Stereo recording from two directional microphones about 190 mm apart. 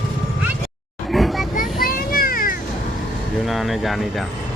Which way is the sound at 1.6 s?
50° left (ahead or behind).